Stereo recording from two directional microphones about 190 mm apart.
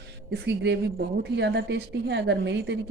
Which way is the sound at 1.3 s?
65° right (ahead or behind).